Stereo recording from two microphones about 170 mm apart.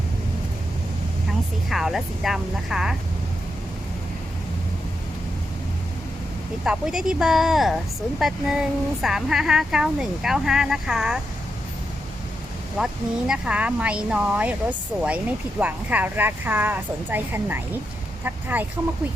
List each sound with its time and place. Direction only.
1.7 s speech: centre (ahead or behind)
6.7 s speech: 5° right (ahead or behind)
12.7 s speech: 5° right (ahead or behind)
18.2 s vehicle: 10° right (ahead or behind)